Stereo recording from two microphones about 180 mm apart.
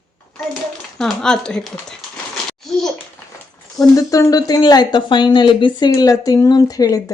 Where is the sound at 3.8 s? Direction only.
20° left (ahead or behind).